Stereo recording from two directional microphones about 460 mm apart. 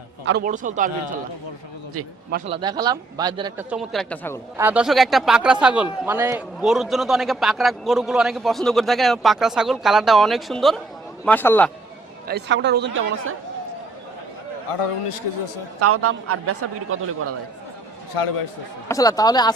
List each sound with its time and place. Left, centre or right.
0.3 s speech: centre
2.5 s a man's voice: centre
12.3 s a man's voice: right
14.7 s a man's voice: left
15.8 s a man's voice: right
18.2 s a man's voice: left
18.9 s speech: centre